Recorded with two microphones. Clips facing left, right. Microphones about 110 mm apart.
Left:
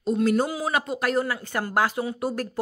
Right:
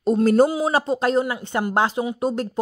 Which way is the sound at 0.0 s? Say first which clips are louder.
Right 6 dB; 40° right (ahead or behind).